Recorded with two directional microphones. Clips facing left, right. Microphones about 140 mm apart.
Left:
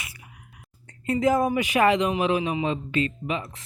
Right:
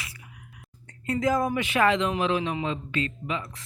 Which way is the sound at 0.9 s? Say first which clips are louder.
Left 3 dB; 20° left (ahead or behind).